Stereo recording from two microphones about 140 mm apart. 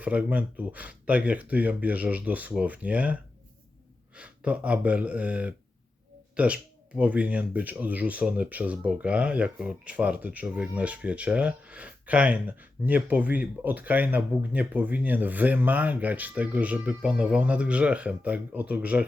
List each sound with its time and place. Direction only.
0.0 s speech: 10° right (ahead or behind)